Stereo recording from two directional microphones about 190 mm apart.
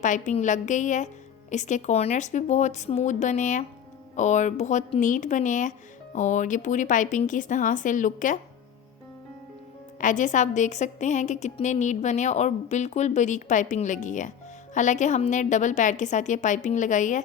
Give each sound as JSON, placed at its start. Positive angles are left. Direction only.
{"t": 0.0, "sound": "a woman's voice", "side_deg": 40}
{"t": 10.0, "sound": "a woman's voice", "side_deg": 40}